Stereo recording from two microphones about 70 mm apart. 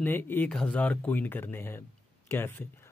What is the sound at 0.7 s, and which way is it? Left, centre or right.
Speech, left.